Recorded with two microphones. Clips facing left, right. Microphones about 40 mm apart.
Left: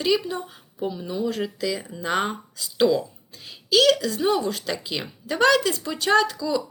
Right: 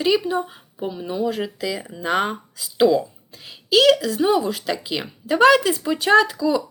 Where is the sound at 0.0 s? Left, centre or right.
Centre.